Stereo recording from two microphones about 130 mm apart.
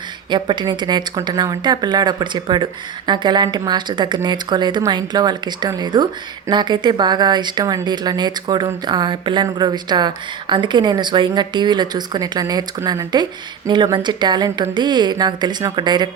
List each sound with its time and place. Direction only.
0.3 s speech: 35° right (ahead or behind)